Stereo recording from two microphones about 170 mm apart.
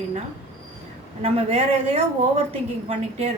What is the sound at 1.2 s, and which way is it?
A woman's voice, 35° right (ahead or behind).